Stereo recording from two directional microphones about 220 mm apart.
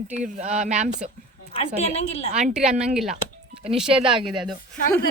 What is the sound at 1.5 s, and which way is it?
Speech, 25° left (ahead or behind).